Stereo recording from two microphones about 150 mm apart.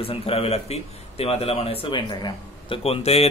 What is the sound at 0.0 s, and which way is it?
A man's voice, 40° left (ahead or behind).